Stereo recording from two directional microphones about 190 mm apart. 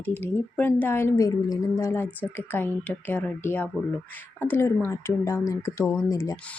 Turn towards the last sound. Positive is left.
turn(degrees=15)  # may be behind; listen again after turning